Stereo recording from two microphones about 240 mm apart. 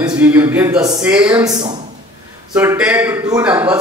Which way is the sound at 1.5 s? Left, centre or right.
Centre.